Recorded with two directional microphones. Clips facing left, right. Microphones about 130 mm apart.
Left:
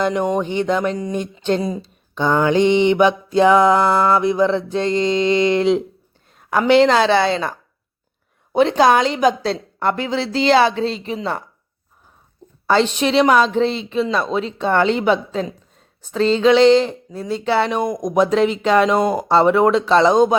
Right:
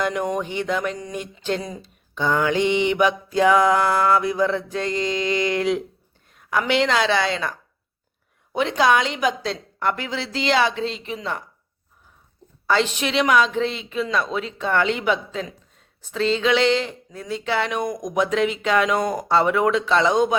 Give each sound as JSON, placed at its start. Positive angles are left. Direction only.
{"t": 0.0, "sound": "a sound", "side_deg": 25}
{"t": 6.3, "sound": "speech", "side_deg": 35}
{"t": 8.5, "sound": "speech", "side_deg": 35}
{"t": 12.6, "sound": "speech", "side_deg": 30}